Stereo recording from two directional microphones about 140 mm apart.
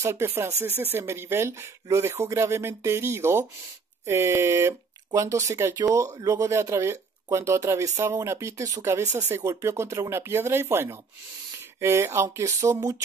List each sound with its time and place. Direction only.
0.0 s speech: 20° right (ahead or behind)